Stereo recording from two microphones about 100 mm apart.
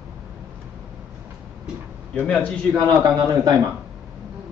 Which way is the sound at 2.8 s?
30° right (ahead or behind).